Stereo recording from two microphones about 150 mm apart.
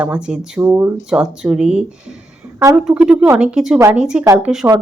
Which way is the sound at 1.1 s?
5° right (ahead or behind).